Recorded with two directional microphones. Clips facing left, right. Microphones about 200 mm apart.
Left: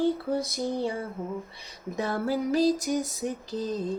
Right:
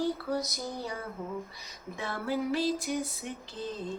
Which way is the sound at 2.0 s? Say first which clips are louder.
Left 5 dB; 40° left (ahead or behind).